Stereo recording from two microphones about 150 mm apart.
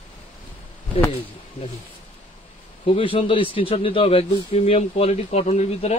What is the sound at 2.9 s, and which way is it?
Speech, 35° left (ahead or behind).